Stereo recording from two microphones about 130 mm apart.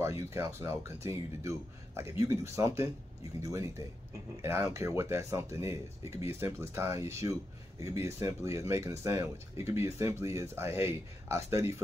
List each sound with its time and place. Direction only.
0.0 s speech: 20° right (ahead or behind)